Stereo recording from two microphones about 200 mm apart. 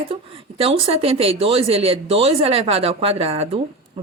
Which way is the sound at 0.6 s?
30° right (ahead or behind).